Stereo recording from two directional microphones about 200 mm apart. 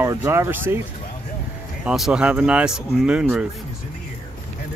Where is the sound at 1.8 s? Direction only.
5° right (ahead or behind).